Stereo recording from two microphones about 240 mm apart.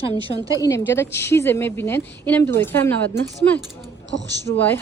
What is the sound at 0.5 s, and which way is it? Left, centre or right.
A woman's voice, centre.